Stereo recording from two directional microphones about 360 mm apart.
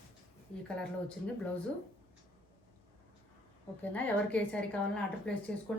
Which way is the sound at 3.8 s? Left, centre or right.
Centre.